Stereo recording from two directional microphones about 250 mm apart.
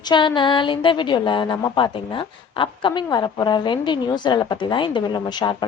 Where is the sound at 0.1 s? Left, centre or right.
Centre.